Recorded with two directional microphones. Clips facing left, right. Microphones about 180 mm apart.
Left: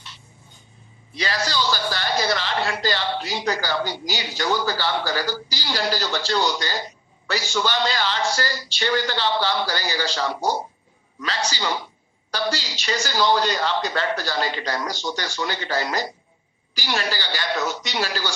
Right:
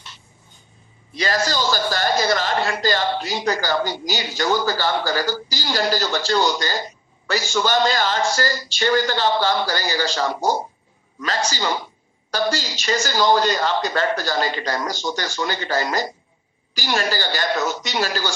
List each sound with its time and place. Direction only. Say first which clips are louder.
1.1 s a man's voice: right 3 dB; 45° right (ahead or behind)